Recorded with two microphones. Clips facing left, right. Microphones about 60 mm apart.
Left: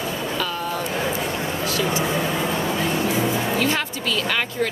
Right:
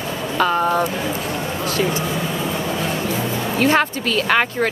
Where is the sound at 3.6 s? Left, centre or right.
Right.